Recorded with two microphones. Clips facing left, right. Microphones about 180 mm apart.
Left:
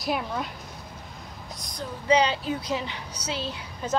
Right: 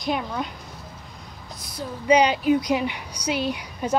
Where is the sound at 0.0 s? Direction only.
5° left (ahead or behind).